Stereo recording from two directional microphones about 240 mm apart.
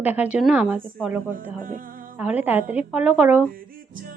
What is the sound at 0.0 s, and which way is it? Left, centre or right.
Speech, centre.